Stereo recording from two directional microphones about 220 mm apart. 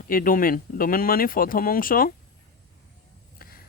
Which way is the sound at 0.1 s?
40° left (ahead or behind).